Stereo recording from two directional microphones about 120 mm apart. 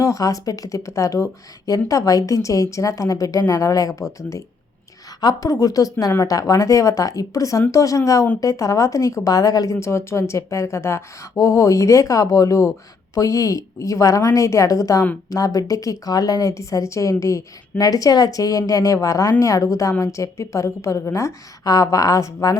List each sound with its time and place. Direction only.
0.0 s speech: 25° left (ahead or behind)